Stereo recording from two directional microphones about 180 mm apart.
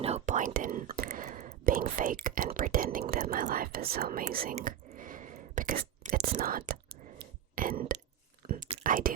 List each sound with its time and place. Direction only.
0.0 s whispering: 40° right (ahead or behind)
6.1 s speech: 55° right (ahead or behind)
7.5 s a sound: 50° right (ahead or behind)